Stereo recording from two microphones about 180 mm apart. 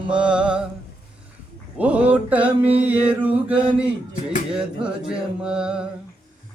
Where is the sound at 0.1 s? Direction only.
5° right (ahead or behind).